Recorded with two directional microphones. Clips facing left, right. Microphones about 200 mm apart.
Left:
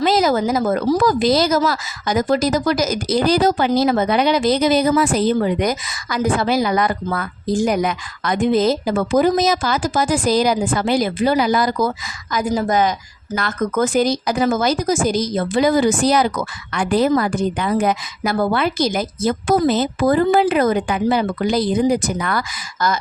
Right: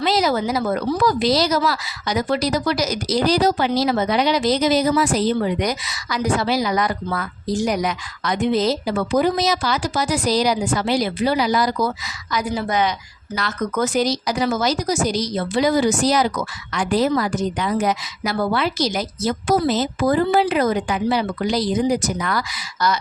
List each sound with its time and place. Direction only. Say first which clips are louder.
0.0 s a woman's voice: left 3 dB; 45° left (ahead or behind)